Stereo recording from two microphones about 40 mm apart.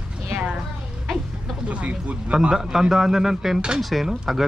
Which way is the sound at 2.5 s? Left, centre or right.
Centre.